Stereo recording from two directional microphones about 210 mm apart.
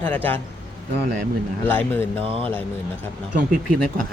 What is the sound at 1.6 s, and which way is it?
Speech, 10° left (ahead or behind).